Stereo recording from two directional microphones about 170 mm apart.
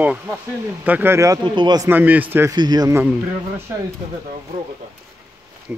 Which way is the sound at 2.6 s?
25° right (ahead or behind).